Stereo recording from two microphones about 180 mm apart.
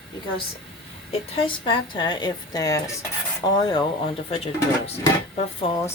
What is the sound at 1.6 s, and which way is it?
A woman's voice, 25° left (ahead or behind).